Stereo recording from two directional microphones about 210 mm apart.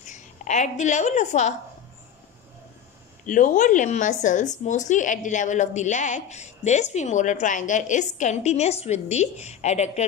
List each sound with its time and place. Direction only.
0.1 s a woman's voice: 35° left (ahead or behind)
3.3 s speech: 35° left (ahead or behind)